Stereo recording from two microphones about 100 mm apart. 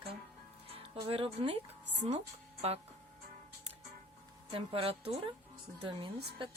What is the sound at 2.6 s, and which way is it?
Speech, 90° right.